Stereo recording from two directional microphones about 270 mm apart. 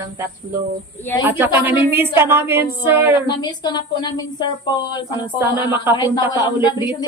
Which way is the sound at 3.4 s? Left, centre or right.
Centre.